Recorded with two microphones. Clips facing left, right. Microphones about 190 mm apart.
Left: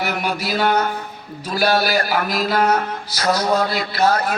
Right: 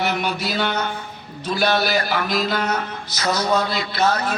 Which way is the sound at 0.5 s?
45° left (ahead or behind).